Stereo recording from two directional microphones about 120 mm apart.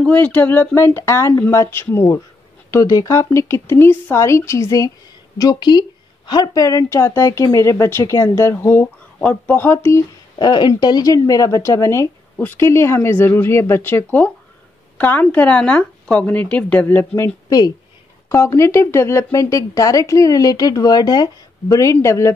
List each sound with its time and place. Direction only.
0.0 s a woman's voice: 10° left (ahead or behind)
9.9 s a woman's voice: 35° left (ahead or behind)
17.5 s a woman's voice: 30° left (ahead or behind)